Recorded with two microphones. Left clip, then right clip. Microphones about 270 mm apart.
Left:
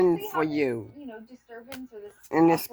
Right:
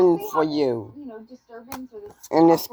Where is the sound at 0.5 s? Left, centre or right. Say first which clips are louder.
Right 4 dB; centre.